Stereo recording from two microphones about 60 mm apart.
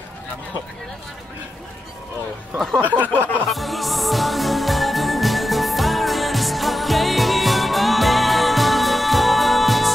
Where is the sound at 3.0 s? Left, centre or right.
Right.